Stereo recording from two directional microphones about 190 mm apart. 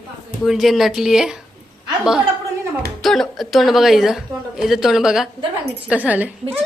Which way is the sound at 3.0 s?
Centre (ahead or behind).